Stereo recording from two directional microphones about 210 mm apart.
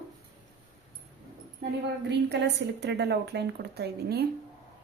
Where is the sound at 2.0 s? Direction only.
55° right (ahead or behind).